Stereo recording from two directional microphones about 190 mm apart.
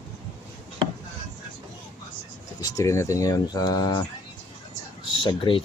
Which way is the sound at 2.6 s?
15° left (ahead or behind).